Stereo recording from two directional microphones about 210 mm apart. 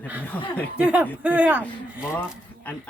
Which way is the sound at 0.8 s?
5° right (ahead or behind).